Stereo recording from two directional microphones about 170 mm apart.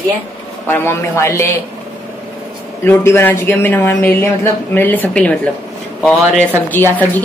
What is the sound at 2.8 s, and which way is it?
Speech, 15° left (ahead or behind).